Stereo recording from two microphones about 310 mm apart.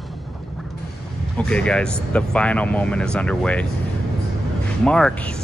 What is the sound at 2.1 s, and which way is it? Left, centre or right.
Speech, centre.